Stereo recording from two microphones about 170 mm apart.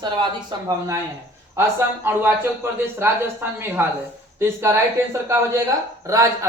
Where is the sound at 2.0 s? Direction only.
15° right (ahead or behind).